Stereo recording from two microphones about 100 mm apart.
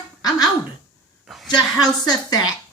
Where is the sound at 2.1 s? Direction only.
40° left (ahead or behind).